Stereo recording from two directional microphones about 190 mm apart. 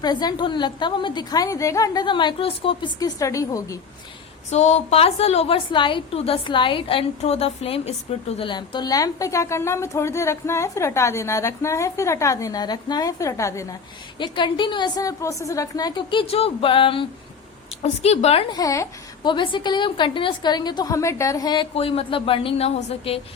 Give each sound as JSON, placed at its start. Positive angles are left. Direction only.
{"t": 0.0, "sound": "speech", "side_deg": 20}
{"t": 4.5, "sound": "a woman's voice", "side_deg": 35}
{"t": 18.5, "sound": "speech", "side_deg": 15}